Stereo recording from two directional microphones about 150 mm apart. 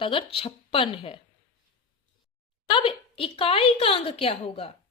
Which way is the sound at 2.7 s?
35° left (ahead or behind).